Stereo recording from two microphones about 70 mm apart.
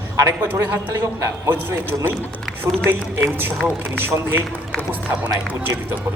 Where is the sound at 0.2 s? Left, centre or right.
Right.